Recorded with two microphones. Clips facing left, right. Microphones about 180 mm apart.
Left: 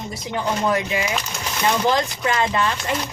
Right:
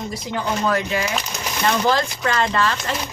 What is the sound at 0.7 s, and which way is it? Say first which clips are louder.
Speech: even; 20° left (ahead or behind).